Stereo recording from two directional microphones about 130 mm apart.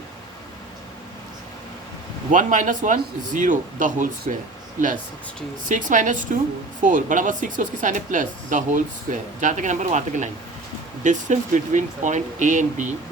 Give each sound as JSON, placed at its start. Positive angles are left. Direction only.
{"t": 2.3, "sound": "speech", "side_deg": -90}
{"t": 5.6, "sound": "speech", "side_deg": -80}